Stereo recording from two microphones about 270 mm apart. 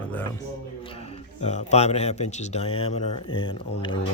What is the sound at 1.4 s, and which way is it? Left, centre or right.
Speech, left.